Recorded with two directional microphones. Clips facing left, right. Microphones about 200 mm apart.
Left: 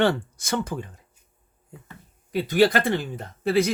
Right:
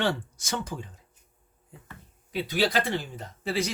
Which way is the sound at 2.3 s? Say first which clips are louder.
Left 7 dB; 50° left (ahead or behind).